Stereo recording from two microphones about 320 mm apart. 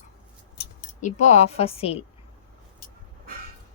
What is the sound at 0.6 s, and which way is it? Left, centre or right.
Speech, left.